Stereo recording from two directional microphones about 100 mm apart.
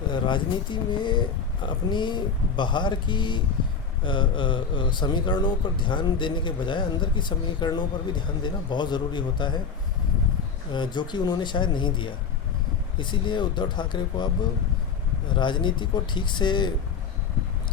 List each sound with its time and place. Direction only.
0.1 s a man's voice: 50° left (ahead or behind)
10.7 s a man's voice: 50° left (ahead or behind)
15.4 s a man's voice: 50° left (ahead or behind)